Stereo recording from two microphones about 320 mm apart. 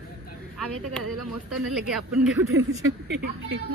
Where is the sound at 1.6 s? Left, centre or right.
Centre.